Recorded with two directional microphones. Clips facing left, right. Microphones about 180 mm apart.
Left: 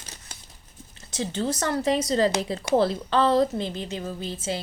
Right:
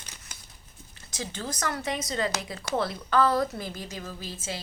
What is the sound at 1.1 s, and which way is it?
A woman's voice, 35° left (ahead or behind).